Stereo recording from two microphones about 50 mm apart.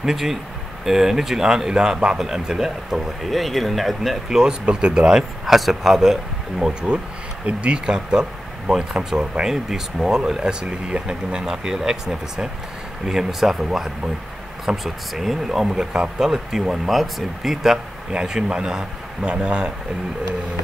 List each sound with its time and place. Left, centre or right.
0.0 s speech: centre
4.4 s speech: centre
7.4 s speech: right